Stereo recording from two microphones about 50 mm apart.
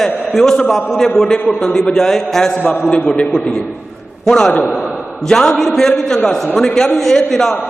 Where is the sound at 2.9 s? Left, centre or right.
Left.